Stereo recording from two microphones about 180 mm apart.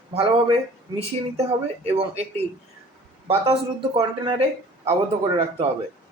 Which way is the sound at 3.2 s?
35° right (ahead or behind).